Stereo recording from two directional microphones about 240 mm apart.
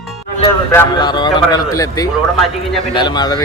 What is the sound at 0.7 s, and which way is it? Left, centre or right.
Speech, centre.